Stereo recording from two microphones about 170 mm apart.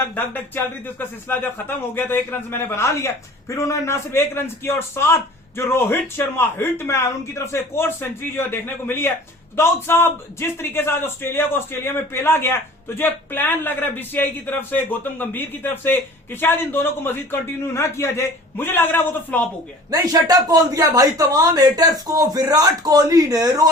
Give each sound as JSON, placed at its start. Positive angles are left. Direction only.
{"t": 0.0, "sound": "a man's voice", "side_deg": 10}
{"t": 19.9, "sound": "speech", "side_deg": -20}